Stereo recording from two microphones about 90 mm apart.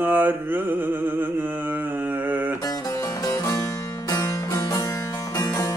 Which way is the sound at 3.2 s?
40° left (ahead or behind).